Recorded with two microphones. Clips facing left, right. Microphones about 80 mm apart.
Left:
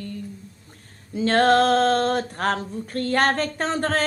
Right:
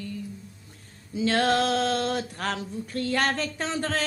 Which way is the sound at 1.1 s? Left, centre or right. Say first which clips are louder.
Left 6 dB; left.